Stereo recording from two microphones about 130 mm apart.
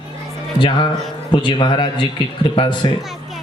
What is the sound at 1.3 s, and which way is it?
A man's voice, 35° left (ahead or behind).